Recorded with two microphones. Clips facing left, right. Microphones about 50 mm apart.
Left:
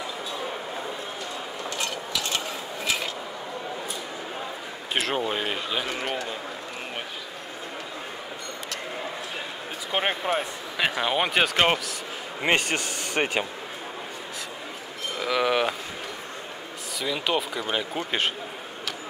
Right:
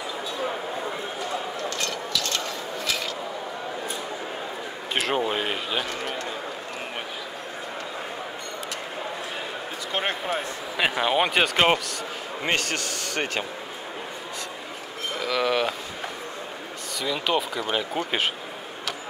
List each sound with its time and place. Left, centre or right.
1.6 s a sound: centre
4.9 s speech: centre
5.9 s speech: centre
9.9 s speech: centre
10.8 s speech: centre
12.4 s speech: centre
15.2 s a sound: centre
17.0 s speech: centre